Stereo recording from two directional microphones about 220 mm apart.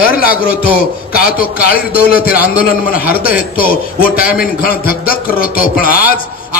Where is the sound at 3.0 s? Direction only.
40° left (ahead or behind).